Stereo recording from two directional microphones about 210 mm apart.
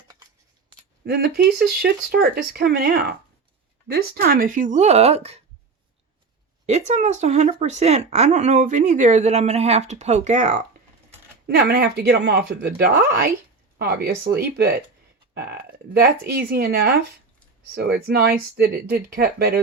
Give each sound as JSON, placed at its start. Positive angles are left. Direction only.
{"t": 1.0, "sound": "speech", "side_deg": -50}
{"t": 6.7, "sound": "speech", "side_deg": -35}
{"t": 11.4, "sound": "speech", "side_deg": -50}